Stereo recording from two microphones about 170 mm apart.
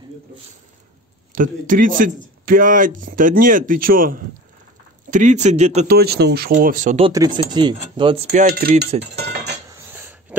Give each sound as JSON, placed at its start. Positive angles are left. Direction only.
{"t": 1.3, "sound": "a man's voice", "side_deg": -50}
{"t": 5.1, "sound": "a man's voice", "side_deg": -45}
{"t": 5.9, "sound": "speech", "side_deg": -70}
{"t": 6.5, "sound": "a man's voice", "side_deg": -50}
{"t": 7.1, "sound": "speech", "side_deg": -25}
{"t": 8.5, "sound": "cutlery", "side_deg": -65}
{"t": 9.1, "sound": "speech", "side_deg": -75}
{"t": 9.7, "sound": "dishes", "side_deg": -15}